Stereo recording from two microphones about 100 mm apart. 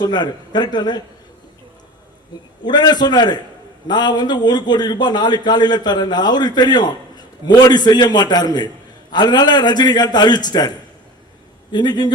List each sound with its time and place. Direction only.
0.0 s a man's voice: 45° left (ahead or behind)
2.3 s a man's voice: 45° left (ahead or behind)
11.7 s a man's voice: 45° left (ahead or behind)